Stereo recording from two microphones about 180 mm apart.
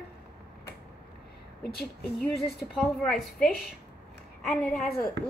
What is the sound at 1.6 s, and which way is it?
Speech, 65° left (ahead or behind).